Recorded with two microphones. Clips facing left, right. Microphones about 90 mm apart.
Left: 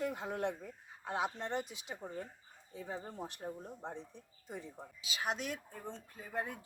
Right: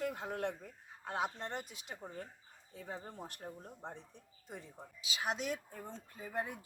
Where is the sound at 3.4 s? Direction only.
15° left (ahead or behind).